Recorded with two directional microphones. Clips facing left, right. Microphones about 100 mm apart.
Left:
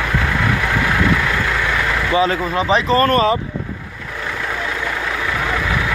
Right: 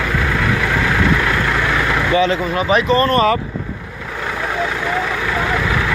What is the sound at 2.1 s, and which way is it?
Speech, 30° left (ahead or behind).